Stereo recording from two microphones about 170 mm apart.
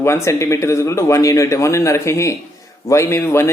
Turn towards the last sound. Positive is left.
turn(degrees=15)  # may be behind; listen again after turning